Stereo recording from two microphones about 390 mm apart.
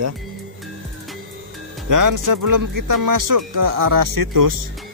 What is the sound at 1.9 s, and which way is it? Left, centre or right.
Speech, right.